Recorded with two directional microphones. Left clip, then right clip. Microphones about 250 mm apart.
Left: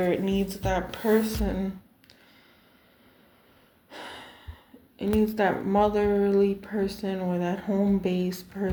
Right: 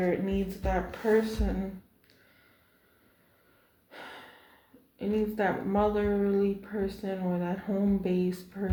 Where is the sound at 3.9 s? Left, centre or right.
Left.